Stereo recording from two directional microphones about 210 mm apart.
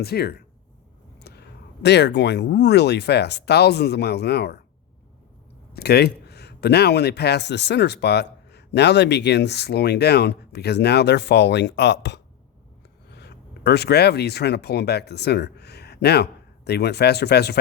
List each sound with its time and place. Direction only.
0.0 s speech: 50° left (ahead or behind)
5.7 s speech: 50° left (ahead or behind)